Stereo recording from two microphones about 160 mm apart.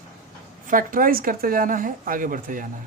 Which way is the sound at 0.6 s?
60° right (ahead or behind).